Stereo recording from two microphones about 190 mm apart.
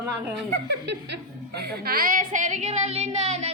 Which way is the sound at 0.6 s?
65° right (ahead or behind).